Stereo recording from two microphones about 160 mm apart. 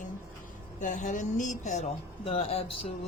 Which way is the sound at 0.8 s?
55° left (ahead or behind).